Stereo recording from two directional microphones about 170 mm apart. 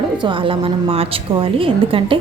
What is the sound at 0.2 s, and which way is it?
A woman's voice, 30° right (ahead or behind).